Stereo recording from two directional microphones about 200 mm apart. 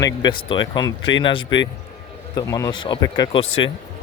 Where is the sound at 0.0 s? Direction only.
20° left (ahead or behind).